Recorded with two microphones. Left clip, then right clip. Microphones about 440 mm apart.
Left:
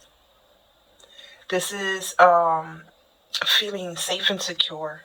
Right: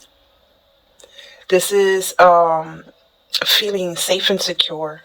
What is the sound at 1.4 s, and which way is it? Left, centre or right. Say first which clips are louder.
Speech: right 11 dB; right.